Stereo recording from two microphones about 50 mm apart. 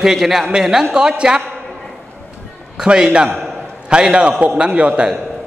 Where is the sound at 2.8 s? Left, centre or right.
Centre.